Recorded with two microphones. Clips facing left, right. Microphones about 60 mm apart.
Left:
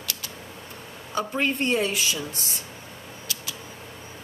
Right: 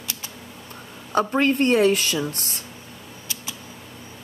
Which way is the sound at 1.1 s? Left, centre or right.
Right.